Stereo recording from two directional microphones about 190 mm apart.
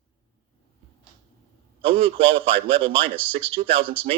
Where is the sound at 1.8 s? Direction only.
30° right (ahead or behind).